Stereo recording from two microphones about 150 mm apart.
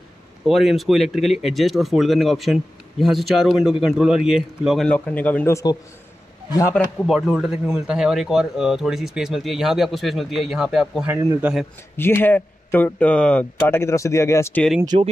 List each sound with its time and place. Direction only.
0.5 s speech: centre (ahead or behind)
4.8 s speech: 10° left (ahead or behind)
6.7 s speech: centre (ahead or behind)
12.0 s speech: 15° left (ahead or behind)
14.9 s speech: 40° right (ahead or behind)